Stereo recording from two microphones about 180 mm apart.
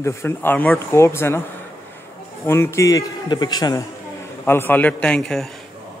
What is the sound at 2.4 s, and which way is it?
A man's voice, 15° left (ahead or behind).